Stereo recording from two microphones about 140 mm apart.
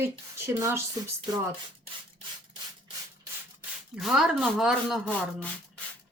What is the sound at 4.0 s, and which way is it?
Speech, 5° right (ahead or behind).